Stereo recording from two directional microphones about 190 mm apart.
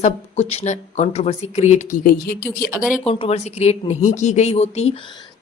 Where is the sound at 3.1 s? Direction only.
30° left (ahead or behind).